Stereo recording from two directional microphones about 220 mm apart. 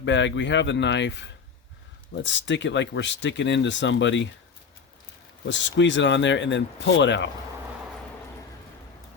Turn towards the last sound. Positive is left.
turn(degrees=55)  # may be behind; listen again after turning